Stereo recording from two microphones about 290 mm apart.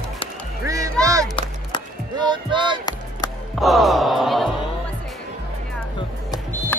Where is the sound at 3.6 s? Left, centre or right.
Centre.